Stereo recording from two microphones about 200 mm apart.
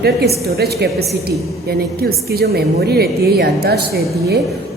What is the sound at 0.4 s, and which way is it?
A woman's voice, 50° right (ahead or behind).